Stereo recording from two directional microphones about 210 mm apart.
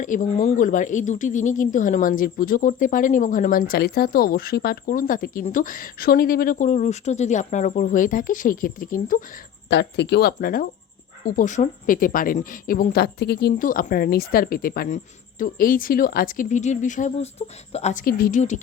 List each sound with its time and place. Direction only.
0.0 s speech: 35° left (ahead or behind)
9.6 s speech: 55° left (ahead or behind); by 18.0 s 30° left (ahead or behind)
18.0 s speech: 40° left (ahead or behind)